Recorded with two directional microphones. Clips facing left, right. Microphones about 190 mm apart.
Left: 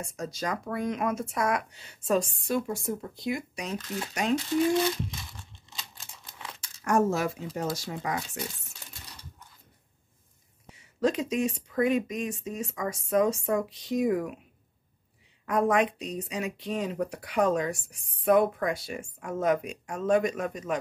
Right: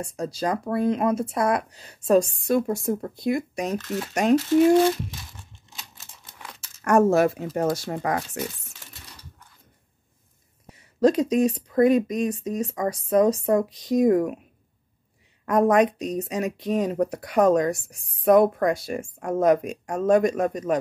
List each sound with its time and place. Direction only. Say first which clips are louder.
0.0 s speech: right 6 dB; 30° right (ahead or behind)
6.8 s speech: right 7 dB; 65° right (ahead or behind)
10.7 s speech: right 7 dB; 40° right (ahead or behind)
15.4 s speech: right 6 dB; 45° right (ahead or behind)